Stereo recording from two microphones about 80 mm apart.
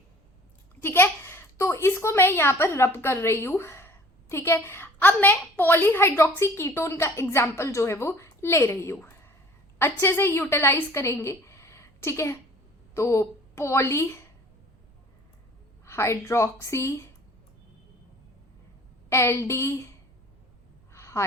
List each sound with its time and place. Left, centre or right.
0.8 s a woman's voice: left
9.0 s a sound: left
9.7 s a woman's voice: left
15.9 s a woman's voice: left
19.1 s a woman's voice: left
20.9 s a sound: left